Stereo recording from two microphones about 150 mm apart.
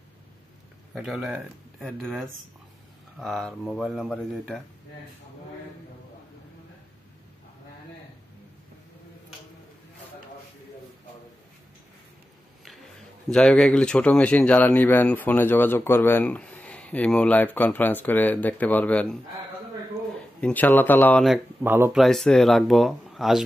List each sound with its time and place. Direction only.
0.9 s speech: 5° right (ahead or behind)
13.3 s speech: 5° left (ahead or behind)
20.3 s speech: 10° left (ahead or behind)
21.6 s speech: 15° right (ahead or behind)
21.9 s speech: centre (ahead or behind)